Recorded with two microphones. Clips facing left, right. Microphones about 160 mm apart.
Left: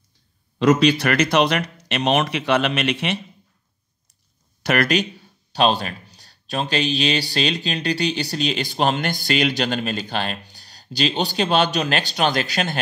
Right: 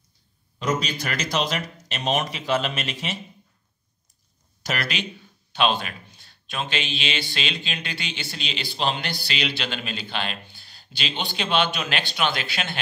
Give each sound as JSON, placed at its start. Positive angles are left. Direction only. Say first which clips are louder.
{"t": 0.6, "sound": "speech", "louder": "left 10 dB", "side_deg": 75}
{"t": 4.6, "sound": "speech", "louder": "left 9 dB", "side_deg": 50}